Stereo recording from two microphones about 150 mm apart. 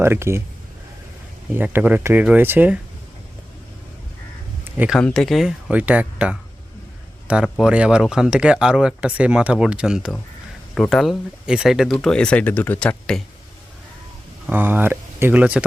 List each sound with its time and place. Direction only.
0.0 s speech: 15° right (ahead or behind)
1.5 s speech: 10° right (ahead or behind)
4.9 s speech: 5° left (ahead or behind)
14.4 s speech: 10° right (ahead or behind)